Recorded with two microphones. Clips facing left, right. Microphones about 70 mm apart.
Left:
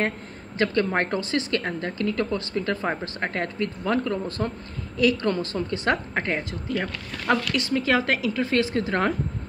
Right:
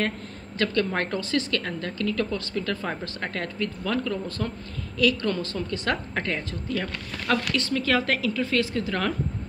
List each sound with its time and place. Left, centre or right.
0.6 s a woman's voice: left